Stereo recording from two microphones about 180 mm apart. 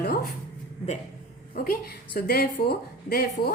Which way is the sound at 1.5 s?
55° left (ahead or behind).